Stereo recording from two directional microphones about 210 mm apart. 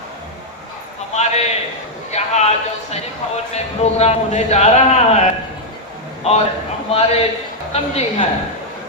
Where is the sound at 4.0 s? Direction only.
30° left (ahead or behind).